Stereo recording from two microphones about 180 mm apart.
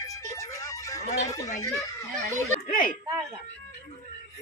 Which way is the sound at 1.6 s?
15° left (ahead or behind).